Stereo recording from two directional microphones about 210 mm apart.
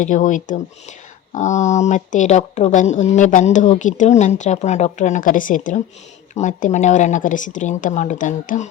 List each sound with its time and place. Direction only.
0.0 s speech: 35° left (ahead or behind)